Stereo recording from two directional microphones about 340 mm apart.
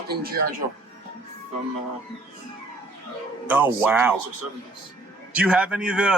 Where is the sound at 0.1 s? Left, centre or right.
Right.